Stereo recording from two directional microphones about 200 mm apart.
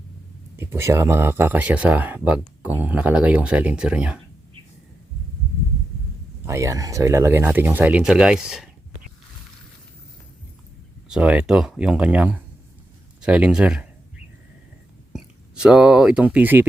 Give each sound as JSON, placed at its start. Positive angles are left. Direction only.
{"t": 0.5, "sound": "speech", "side_deg": -10}
{"t": 6.4, "sound": "speech", "side_deg": -15}
{"t": 11.1, "sound": "speech", "side_deg": -5}
{"t": 15.1, "sound": "speech", "side_deg": -5}